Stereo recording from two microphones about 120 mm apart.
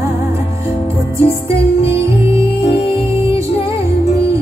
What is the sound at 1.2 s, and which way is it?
Music, 20° right (ahead or behind).